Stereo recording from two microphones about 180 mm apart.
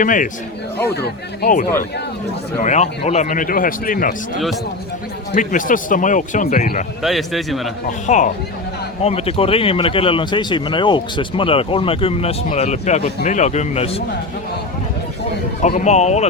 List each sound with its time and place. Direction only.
0.0 s a man's voice: 45° left (ahead or behind)
0.9 s speech: 60° left (ahead or behind)
2.6 s a man's voice: 40° left (ahead or behind)
5.3 s a man's voice: 45° left (ahead or behind)
7.0 s a man's voice: centre (ahead or behind)
7.9 s a man's voice: 45° left (ahead or behind)
15.6 s speech: 40° left (ahead or behind)